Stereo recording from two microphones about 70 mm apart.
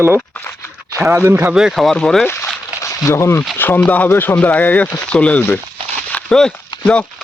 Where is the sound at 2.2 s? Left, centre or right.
Left.